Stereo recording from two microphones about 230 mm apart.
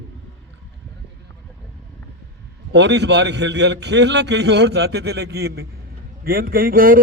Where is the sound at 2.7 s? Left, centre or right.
Right.